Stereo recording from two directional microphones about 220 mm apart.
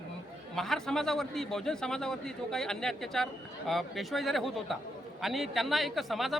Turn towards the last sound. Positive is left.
turn(degrees=0)  # may be behind; listen again after turning